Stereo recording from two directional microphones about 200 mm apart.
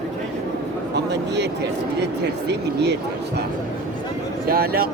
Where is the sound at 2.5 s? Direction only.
55° right (ahead or behind).